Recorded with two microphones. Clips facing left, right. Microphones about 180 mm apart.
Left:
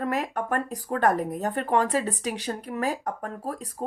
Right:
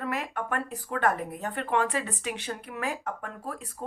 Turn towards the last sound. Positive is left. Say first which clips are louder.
# left 5 dB
turn(degrees=35)  # may be behind; listen again after turning